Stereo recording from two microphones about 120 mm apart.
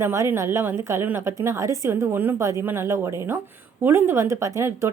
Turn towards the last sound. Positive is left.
turn(degrees=-25)  # may be behind; listen again after turning